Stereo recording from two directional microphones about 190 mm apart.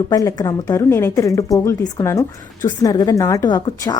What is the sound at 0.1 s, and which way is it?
A woman's voice, 20° left (ahead or behind).